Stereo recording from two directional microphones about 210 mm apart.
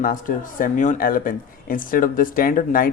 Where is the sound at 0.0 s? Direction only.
40° left (ahead or behind).